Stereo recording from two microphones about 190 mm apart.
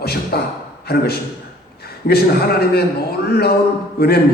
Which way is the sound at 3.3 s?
55° left (ahead or behind).